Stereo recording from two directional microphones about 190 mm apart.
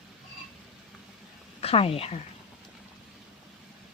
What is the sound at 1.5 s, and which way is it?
Speech, 30° left (ahead or behind).